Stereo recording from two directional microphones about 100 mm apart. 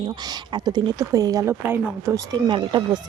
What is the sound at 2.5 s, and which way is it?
Speech, 55° right (ahead or behind).